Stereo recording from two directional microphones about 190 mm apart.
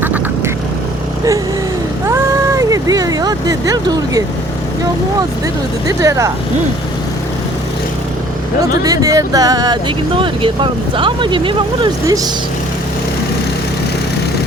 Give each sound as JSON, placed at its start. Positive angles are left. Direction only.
{"t": 0.0, "sound": "quack", "side_deg": -10}
{"t": 2.0, "sound": "vehicle", "side_deg": -15}
{"t": 6.0, "sound": "speech", "side_deg": -15}
{"t": 8.8, "sound": "speech", "side_deg": -20}